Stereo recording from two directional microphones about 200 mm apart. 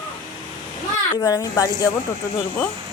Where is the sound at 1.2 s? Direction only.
15° left (ahead or behind).